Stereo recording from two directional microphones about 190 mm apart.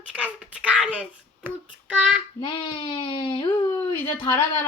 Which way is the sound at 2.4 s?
25° left (ahead or behind).